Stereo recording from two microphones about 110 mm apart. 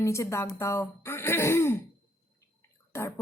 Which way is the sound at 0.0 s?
25° left (ahead or behind).